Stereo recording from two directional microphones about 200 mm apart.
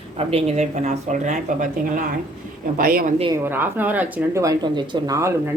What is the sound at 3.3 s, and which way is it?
Speech, 10° right (ahead or behind).